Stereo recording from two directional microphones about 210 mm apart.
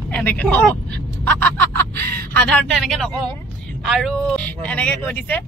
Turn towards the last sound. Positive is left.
turn(degrees=5)  # may be behind; listen again after turning